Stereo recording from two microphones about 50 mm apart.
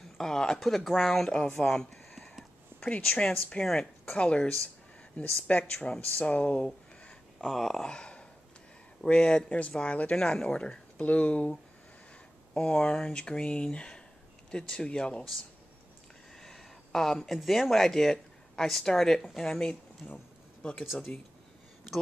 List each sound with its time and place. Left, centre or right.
0.2 s speech: centre; by 6.7 s left
7.3 s speech: centre; by 11.5 s left
12.5 s speech: left
16.3 s speech: centre
20.0 s speech: left